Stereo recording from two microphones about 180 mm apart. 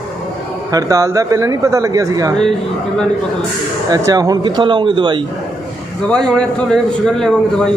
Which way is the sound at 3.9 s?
20° right (ahead or behind).